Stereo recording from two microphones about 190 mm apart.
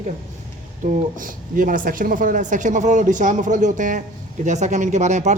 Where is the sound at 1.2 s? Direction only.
45° right (ahead or behind).